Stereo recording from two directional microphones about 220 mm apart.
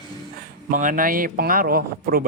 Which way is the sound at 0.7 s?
35° right (ahead or behind).